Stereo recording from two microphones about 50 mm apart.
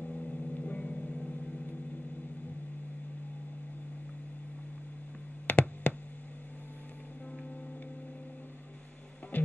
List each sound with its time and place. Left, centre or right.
0.0 s vehicle: left
5.5 s a sound: left
9.3 s music: left